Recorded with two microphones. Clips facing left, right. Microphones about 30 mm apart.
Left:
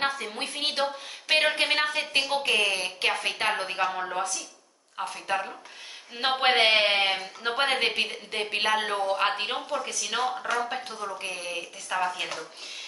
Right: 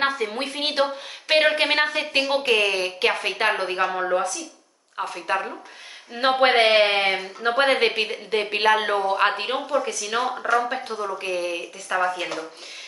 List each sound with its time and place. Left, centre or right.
0.0 s a woman's voice: centre
10.2 s speech: centre
11.1 s a woman's voice: centre